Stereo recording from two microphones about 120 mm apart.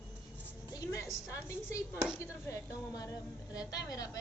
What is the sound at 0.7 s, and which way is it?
Music, 25° left (ahead or behind).